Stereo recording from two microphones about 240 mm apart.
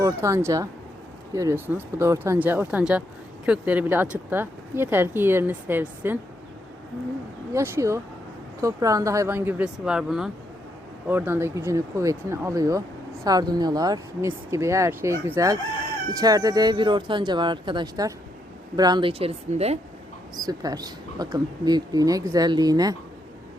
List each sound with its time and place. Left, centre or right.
0.0 s speech: centre
7.5 s speech: centre